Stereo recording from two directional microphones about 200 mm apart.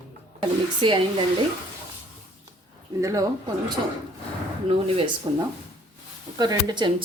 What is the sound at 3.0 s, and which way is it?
Speech, 15° right (ahead or behind).